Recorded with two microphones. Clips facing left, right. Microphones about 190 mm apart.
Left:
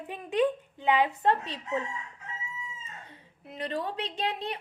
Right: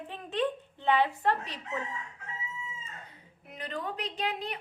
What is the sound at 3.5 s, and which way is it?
A woman's voice, 30° left (ahead or behind).